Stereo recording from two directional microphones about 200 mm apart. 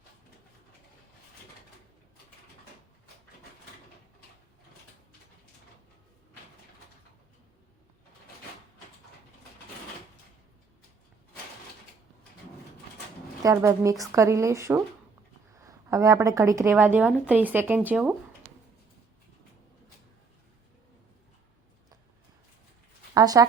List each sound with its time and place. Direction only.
13.4 s a woman's voice: 15° right (ahead or behind)
23.1 s speech: 20° right (ahead or behind)